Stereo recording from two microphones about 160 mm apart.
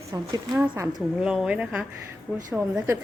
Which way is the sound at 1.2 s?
5° right (ahead or behind).